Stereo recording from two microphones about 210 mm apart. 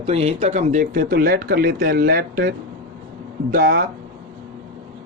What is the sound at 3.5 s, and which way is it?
Speech, 45° right (ahead or behind).